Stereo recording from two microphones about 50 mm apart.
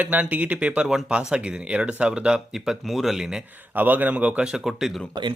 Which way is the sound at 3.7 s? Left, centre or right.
Right.